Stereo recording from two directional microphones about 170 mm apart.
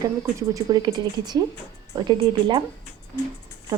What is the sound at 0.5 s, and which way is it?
Speech, 20° right (ahead or behind).